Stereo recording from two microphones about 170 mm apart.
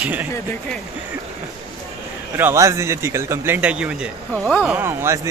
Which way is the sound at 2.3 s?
15° right (ahead or behind).